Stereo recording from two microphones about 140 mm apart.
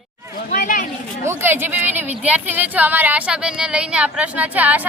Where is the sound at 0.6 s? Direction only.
70° left (ahead or behind).